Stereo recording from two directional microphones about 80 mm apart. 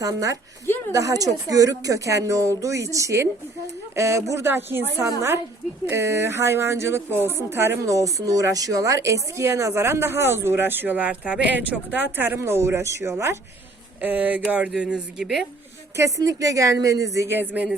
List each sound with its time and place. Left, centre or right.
0.0 s a woman's voice: right
7.9 s a woman's voice: right
14.0 s speech: right; by 15.4 s centre
16.0 s speech: right
17.2 s speech: right